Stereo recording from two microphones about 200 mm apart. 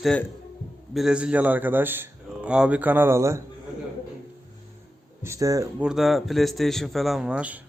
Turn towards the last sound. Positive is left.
turn(degrees=-5)  # may be behind; listen again after turning